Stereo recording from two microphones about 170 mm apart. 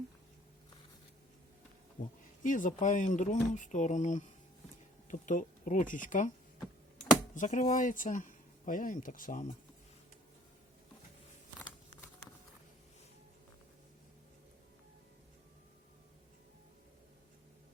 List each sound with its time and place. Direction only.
2.0 s speech: 55° left (ahead or behind)
7.3 s speech: 45° left (ahead or behind)